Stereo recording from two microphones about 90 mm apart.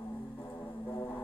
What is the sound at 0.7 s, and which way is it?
Music, 50° left (ahead or behind).